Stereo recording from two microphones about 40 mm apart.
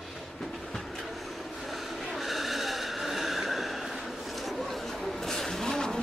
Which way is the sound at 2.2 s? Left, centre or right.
Centre.